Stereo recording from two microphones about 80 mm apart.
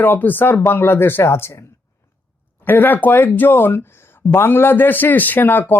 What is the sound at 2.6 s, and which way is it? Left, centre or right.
Speech, left.